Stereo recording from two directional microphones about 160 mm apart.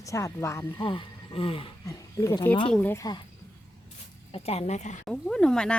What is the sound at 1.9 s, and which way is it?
Speech, 20° left (ahead or behind).